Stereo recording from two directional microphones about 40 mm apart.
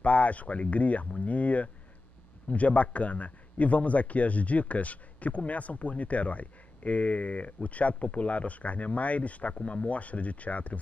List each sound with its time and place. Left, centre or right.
0.0 s a man's voice: left